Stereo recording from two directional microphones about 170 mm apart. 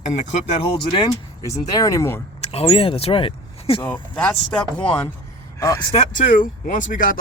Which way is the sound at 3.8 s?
10° left (ahead or behind).